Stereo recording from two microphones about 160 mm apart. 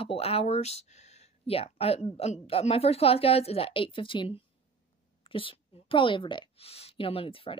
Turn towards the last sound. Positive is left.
turn(degrees=35)  # may be behind; listen again after turning